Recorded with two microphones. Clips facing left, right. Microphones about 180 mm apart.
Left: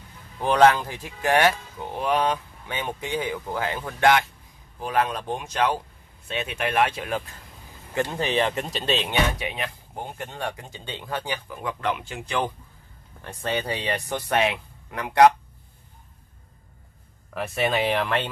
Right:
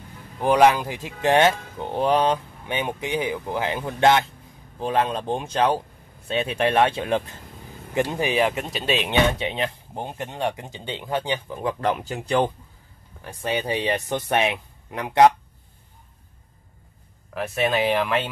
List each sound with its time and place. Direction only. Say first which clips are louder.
0.4 s speech: right 1 dB; 15° right (ahead or behind); by 2.4 s 30° right (ahead or behind)
2.6 s speech: right 4 dB; 15° right (ahead or behind)
7.9 s speech: right 2 dB; 15° right (ahead or behind)
8.9 s speech: right 4 dB; 20° right (ahead or behind); by 12.4 s 40° right (ahead or behind)
13.2 s speech: right 1 dB; 15° right (ahead or behind)
17.3 s speech: right 2 dB; centre (ahead or behind)